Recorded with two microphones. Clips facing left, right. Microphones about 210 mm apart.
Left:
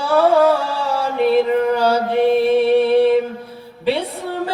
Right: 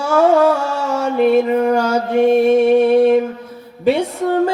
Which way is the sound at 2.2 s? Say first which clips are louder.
Right 3 dB; 45° right (ahead or behind).